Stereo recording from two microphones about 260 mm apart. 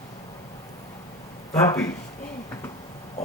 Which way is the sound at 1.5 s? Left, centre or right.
Centre.